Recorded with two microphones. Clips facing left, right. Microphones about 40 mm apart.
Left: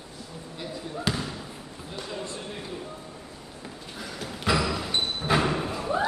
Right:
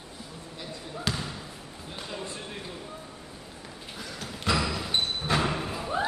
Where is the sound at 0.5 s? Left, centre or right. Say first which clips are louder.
Left 4 dB; centre.